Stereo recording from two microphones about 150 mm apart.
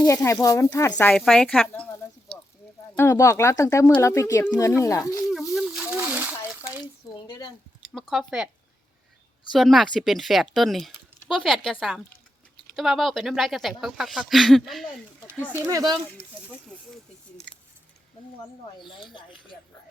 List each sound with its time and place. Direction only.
0.0 s speech: 20° left (ahead or behind)
2.9 s speech: 15° left (ahead or behind)
5.3 s a sound: 5° right (ahead or behind)
7.3 s a sound: 30° left (ahead or behind)
7.9 s speech: centre (ahead or behind)
9.5 s speech: centre (ahead or behind)
15.6 s speech: 25° right (ahead or behind)
18.3 s speech: 30° left (ahead or behind)